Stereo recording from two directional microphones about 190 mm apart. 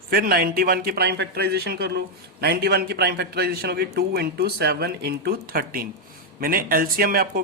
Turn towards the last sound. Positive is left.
turn(degrees=-50)  # may be behind; listen again after turning